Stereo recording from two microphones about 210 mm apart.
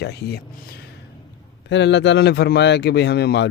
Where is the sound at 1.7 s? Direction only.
60° left (ahead or behind).